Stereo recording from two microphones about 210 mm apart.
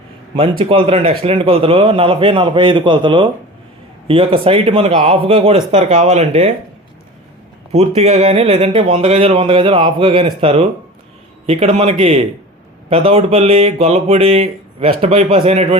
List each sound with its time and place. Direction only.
0.3 s speech: 25° right (ahead or behind)
7.7 s speech: 30° right (ahead or behind)